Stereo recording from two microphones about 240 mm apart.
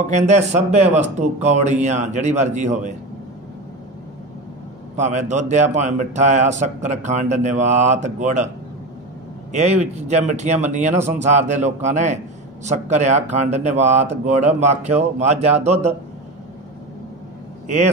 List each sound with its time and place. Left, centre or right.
0.0 s a man's voice: right
4.9 s a man's voice: right
9.5 s a man's voice: right
17.6 s a man's voice: right